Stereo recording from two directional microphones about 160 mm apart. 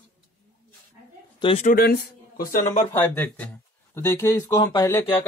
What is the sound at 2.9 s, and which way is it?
Speech, 10° left (ahead or behind).